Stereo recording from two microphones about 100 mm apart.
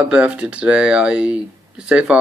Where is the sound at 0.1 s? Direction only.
10° right (ahead or behind).